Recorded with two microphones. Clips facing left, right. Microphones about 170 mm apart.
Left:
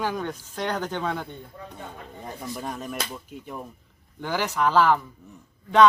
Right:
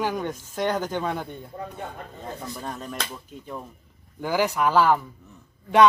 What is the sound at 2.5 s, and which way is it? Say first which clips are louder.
Speech: left 1 dB; 10° left (ahead or behind).